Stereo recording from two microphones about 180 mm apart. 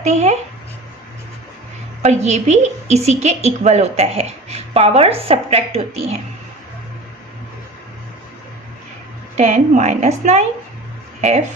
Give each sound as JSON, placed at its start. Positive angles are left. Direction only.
{"t": 0.0, "sound": "speech", "side_deg": -40}
{"t": 2.0, "sound": "speech", "side_deg": -40}
{"t": 9.4, "sound": "speech", "side_deg": -40}